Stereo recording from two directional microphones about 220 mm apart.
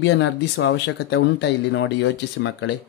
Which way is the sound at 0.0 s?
55° left (ahead or behind).